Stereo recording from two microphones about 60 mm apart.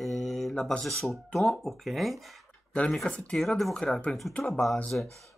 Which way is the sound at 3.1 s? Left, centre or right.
Centre.